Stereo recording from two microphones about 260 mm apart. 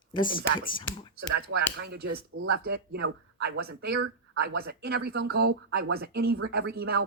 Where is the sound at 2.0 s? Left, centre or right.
Right.